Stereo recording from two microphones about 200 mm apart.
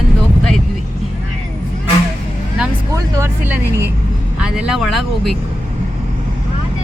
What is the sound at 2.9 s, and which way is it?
Speech, 10° right (ahead or behind).